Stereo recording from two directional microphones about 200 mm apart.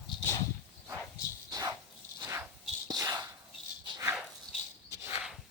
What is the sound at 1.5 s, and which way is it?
Dog, 20° right (ahead or behind).